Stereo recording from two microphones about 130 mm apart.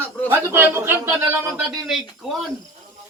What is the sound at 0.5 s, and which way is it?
Speech, 20° right (ahead or behind).